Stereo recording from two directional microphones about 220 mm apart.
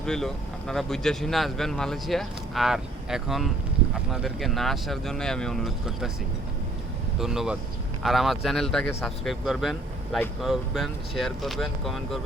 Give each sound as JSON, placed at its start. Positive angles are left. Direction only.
{"t": 0.0, "sound": "speech", "side_deg": 0}
{"t": 7.2, "sound": "speech", "side_deg": 0}